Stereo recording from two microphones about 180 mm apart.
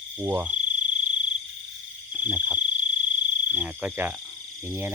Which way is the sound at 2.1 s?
10° right (ahead or behind).